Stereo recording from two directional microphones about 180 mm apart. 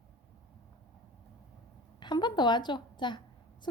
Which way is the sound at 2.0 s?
25° left (ahead or behind).